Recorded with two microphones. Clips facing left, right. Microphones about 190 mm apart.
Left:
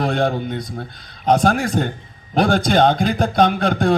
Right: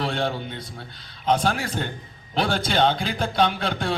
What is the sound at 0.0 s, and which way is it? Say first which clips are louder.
A man's voice: left 7 dB; 45° left (ahead or behind).